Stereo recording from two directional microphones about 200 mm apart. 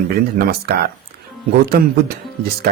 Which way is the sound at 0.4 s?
50° right (ahead or behind).